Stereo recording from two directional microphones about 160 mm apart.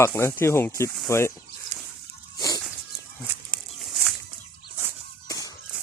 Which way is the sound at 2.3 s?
25° left (ahead or behind).